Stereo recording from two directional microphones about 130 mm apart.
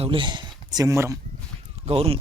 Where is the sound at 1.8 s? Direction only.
45° right (ahead or behind).